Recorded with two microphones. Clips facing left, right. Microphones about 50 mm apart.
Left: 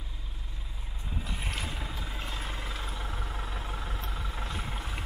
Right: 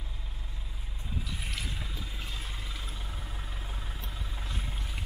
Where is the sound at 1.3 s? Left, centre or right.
Left.